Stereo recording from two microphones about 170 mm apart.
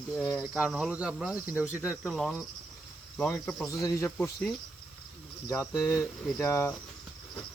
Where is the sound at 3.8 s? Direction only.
20° left (ahead or behind).